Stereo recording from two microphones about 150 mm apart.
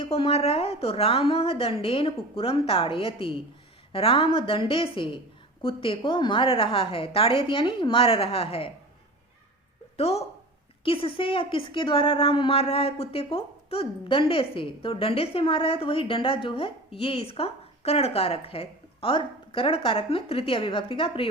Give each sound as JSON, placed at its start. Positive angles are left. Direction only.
{"t": 0.0, "sound": "a woman's voice", "side_deg": 40}
{"t": 10.0, "sound": "a woman's voice", "side_deg": 45}